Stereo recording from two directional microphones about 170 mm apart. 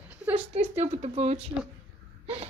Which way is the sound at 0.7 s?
40° right (ahead or behind).